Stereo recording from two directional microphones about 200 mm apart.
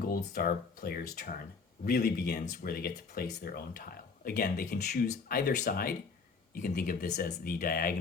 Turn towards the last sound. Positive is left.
turn(degrees=50)  # may be behind; listen again after turning